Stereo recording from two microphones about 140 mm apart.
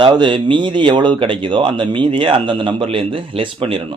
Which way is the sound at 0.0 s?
35° right (ahead or behind).